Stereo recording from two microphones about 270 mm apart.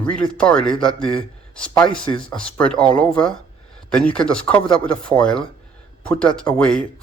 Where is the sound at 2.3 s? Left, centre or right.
Centre.